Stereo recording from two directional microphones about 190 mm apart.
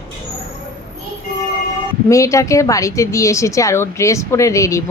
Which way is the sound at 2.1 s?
15° left (ahead or behind).